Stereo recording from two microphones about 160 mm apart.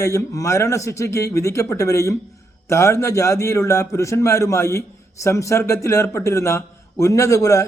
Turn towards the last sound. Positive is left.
turn(degrees=20)  # may be behind; listen again after turning